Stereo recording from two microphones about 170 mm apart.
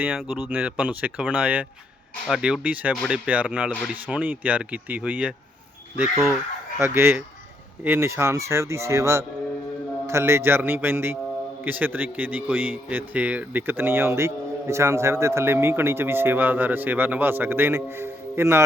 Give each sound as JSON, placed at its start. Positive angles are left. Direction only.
{"t": 0.0, "sound": "a man's voice", "side_deg": -10}